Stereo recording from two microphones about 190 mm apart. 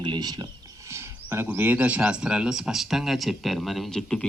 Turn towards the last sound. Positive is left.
turn(degrees=5)  # may be behind; listen again after turning